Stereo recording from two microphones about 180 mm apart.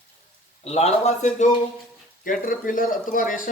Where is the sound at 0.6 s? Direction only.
35° left (ahead or behind).